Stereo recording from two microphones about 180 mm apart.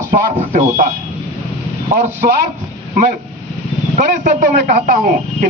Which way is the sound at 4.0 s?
55° right (ahead or behind).